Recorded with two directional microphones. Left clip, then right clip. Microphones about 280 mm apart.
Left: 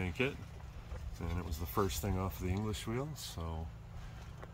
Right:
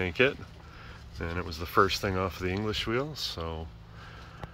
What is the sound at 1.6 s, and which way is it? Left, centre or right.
Speech, centre.